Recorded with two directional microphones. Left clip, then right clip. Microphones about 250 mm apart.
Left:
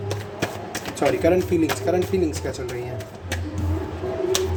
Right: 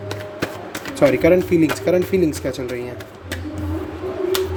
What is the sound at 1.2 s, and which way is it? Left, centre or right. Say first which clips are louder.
Speech: right 4 dB; right.